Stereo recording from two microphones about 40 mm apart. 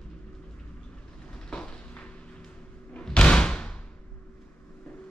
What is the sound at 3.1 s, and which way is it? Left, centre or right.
Slam, left.